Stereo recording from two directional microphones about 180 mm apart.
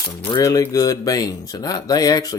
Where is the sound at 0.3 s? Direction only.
20° left (ahead or behind).